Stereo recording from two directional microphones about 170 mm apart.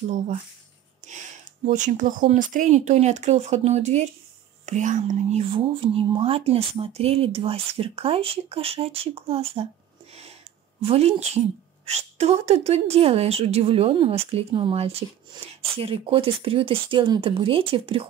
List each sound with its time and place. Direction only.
1.7 s a woman's voice: 45° right (ahead or behind)
5.4 s a woman's voice: 30° right (ahead or behind)
10.8 s a woman's voice: 35° right (ahead or behind)